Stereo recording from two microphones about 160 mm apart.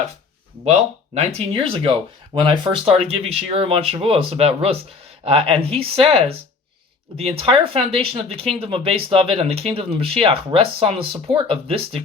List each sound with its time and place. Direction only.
0.6 s speech: 45° right (ahead or behind)